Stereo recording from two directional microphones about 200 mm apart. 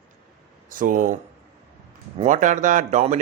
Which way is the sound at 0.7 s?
40° right (ahead or behind).